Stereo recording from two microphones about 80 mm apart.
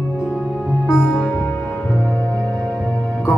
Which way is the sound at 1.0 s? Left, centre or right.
Centre.